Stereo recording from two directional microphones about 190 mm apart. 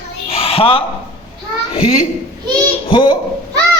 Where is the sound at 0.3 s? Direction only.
30° left (ahead or behind).